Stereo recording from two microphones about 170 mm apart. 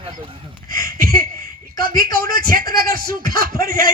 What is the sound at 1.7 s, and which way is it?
Speech, 25° left (ahead or behind).